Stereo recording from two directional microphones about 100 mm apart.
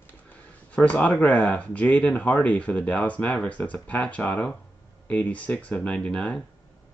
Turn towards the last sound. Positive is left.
turn(degrees=10)  # may be behind; listen again after turning